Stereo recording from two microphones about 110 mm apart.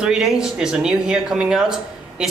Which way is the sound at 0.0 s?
5° right (ahead or behind).